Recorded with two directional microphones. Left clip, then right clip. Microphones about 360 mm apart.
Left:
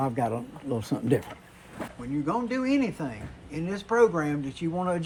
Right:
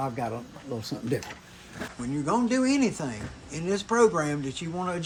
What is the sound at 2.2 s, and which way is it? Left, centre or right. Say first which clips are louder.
Speech: right 3 dB; centre.